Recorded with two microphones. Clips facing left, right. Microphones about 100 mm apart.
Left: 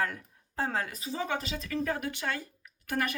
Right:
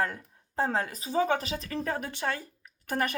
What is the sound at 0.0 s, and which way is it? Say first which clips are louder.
Speech: right 2 dB; 30° right (ahead or behind).